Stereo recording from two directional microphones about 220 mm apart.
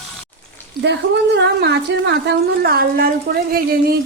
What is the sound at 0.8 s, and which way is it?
A woman's voice, 50° right (ahead or behind).